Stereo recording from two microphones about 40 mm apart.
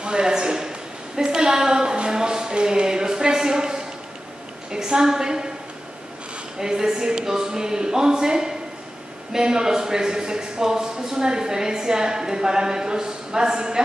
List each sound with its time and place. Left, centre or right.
0.0 s a man's voice: right
6.6 s a man's voice: centre